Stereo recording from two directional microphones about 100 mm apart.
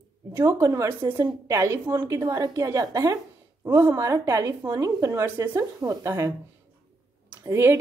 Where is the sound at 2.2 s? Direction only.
35° right (ahead or behind).